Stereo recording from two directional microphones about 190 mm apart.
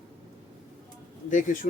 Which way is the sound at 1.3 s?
40° left (ahead or behind).